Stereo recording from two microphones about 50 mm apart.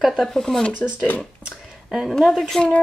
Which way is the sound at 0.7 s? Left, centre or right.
Left.